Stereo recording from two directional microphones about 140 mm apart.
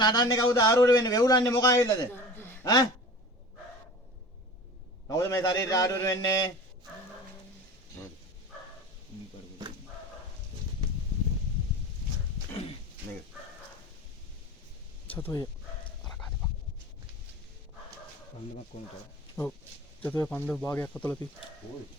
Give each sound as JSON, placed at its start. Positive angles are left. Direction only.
{"t": 0.0, "sound": "a man's voice", "side_deg": 30}
{"t": 5.0, "sound": "a man's voice", "side_deg": 25}
{"t": 15.1, "sound": "speech", "side_deg": 15}
{"t": 18.7, "sound": "speech", "side_deg": 55}
{"t": 20.0, "sound": "speech", "side_deg": 10}